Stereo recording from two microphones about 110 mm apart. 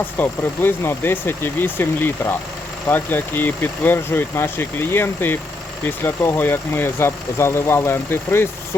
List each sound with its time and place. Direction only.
0.2 s speech: 20° left (ahead or behind)